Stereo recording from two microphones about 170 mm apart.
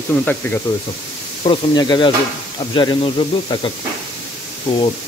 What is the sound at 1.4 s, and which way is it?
Speech, 25° left (ahead or behind).